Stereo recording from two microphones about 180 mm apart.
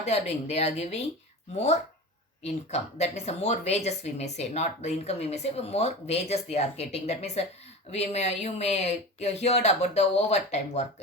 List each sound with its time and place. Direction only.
0.0 s speech: 35° left (ahead or behind)